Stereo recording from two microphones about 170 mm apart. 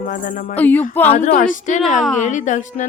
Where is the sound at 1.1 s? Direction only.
50° left (ahead or behind).